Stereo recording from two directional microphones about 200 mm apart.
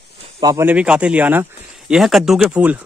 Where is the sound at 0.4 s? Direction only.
15° right (ahead or behind).